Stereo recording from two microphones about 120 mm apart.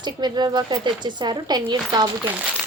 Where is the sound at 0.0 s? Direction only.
35° right (ahead or behind).